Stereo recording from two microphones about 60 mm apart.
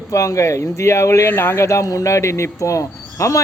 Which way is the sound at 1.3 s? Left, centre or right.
Left.